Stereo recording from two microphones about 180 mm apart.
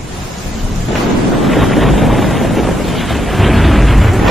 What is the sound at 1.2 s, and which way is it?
Wind noise, centre (ahead or behind).